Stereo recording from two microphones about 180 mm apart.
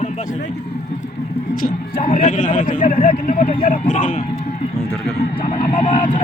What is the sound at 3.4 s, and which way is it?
Speech, 30° left (ahead or behind).